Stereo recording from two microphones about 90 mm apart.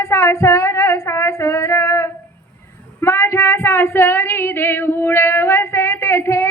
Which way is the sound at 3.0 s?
30° left (ahead or behind).